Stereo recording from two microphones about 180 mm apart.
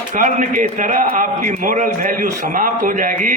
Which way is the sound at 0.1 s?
45° right (ahead or behind).